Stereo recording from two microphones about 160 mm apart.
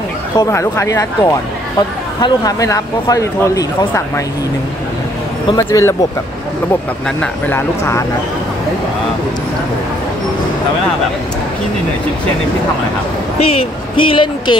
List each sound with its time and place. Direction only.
0.4 s speech: 15° left (ahead or behind)
5.5 s speech: 20° left (ahead or behind)
7.2 s speech: 15° left (ahead or behind)
13.4 s speech: 35° left (ahead or behind)